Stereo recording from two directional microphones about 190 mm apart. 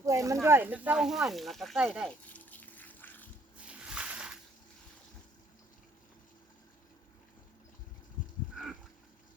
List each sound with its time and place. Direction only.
0.0 s snake: 15° right (ahead or behind)
0.4 s speech: 10° right (ahead or behind); by 3.2 s 10° left (ahead or behind)
3.7 s a sound: 5° right (ahead or behind)